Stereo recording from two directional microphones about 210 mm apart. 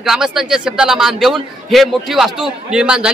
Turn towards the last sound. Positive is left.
turn(degrees=-5)  # may be behind; listen again after turning